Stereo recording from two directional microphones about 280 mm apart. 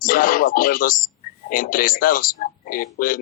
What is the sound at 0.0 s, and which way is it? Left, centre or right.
A man's voice, left.